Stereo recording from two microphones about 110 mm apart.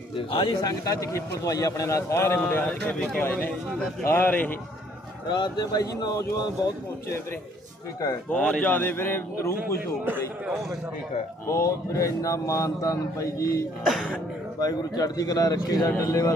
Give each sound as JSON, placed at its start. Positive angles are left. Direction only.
{"t": 0.3, "sound": "speech", "side_deg": 55}
{"t": 0.6, "sound": "a man's voice", "side_deg": 30}
{"t": 2.8, "sound": "a man's voice", "side_deg": 5}
{"t": 3.2, "sound": "a man's voice", "side_deg": 15}
{"t": 5.3, "sound": "a man's voice", "side_deg": 40}
{"t": 8.3, "sound": "a man's voice", "side_deg": 10}
{"t": 11.4, "sound": "a man's voice", "side_deg": 25}
{"t": 13.8, "sound": "a man's voice", "side_deg": 0}
{"t": 14.6, "sound": "a man's voice", "side_deg": 35}